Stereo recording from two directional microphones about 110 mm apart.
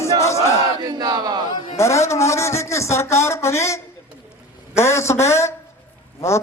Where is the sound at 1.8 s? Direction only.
25° left (ahead or behind).